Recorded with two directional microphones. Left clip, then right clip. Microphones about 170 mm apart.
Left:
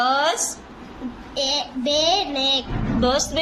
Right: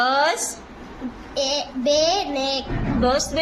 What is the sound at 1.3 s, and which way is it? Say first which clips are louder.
Child singing: even; 15° right (ahead or behind).